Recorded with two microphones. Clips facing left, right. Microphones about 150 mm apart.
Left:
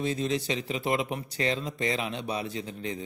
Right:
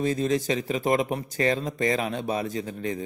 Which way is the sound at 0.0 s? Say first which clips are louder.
Right 4 dB; 45° right (ahead or behind).